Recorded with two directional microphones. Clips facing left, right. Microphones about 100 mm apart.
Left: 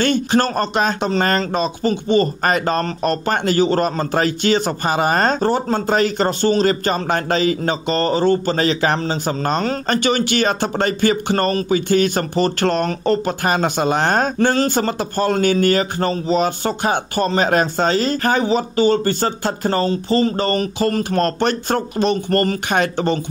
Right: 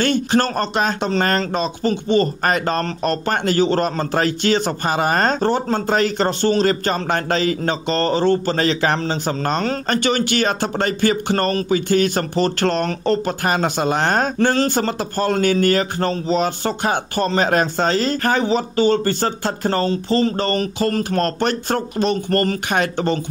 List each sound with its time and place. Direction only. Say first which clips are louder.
0.0 s speech: left 1 dB; 15° left (ahead or behind)